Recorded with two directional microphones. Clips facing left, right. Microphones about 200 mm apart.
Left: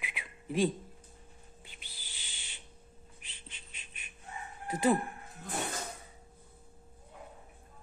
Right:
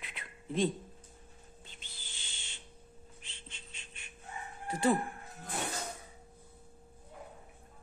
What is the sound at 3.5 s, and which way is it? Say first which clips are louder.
Frog: right 1 dB; 15° left (ahead or behind).